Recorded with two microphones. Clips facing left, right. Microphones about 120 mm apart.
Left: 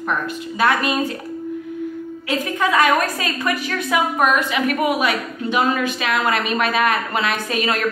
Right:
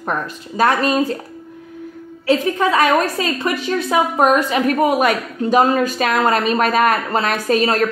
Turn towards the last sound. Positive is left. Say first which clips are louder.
# right 6 dB
turn(degrees=-40)  # may be behind; listen again after turning